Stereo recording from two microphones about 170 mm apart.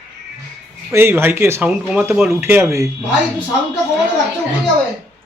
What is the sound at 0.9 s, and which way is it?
Speech, 15° right (ahead or behind).